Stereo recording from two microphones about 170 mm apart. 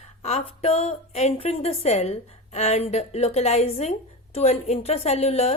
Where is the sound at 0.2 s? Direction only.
40° left (ahead or behind).